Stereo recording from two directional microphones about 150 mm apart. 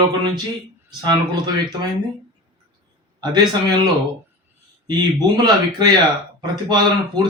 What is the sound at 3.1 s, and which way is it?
Speech, 30° right (ahead or behind).